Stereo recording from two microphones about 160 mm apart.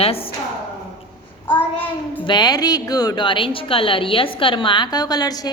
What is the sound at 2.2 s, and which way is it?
A woman's voice, 25° left (ahead or behind).